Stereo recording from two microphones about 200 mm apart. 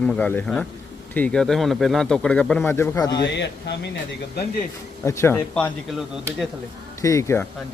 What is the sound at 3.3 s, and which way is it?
Speech, 60° left (ahead or behind).